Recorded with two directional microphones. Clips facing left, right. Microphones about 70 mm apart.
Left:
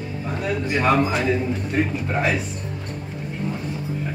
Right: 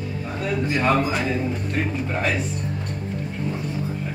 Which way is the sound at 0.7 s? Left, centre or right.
Centre.